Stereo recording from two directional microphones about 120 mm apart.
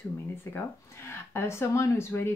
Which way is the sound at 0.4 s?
20° left (ahead or behind).